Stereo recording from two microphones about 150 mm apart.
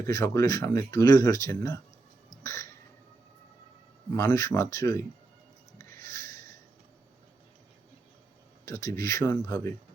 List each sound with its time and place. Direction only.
0.0 s speech: 20° left (ahead or behind)
2.3 s a sound: 20° left (ahead or behind)
4.1 s speech: 20° left (ahead or behind)
5.7 s music: 20° left (ahead or behind)
8.6 s speech: 20° left (ahead or behind)